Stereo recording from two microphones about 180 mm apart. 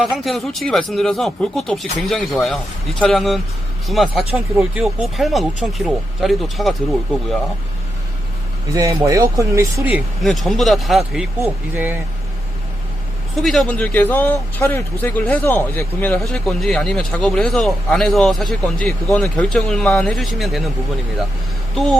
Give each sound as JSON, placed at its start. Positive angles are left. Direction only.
{"t": 0.0, "sound": "a man's voice", "side_deg": 0}
{"t": 8.7, "sound": "speech", "side_deg": -15}
{"t": 9.9, "sound": "a man's voice", "side_deg": 0}
{"t": 13.4, "sound": "a man's voice", "side_deg": 0}